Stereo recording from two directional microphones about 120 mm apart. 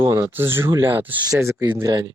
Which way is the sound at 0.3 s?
20° right (ahead or behind).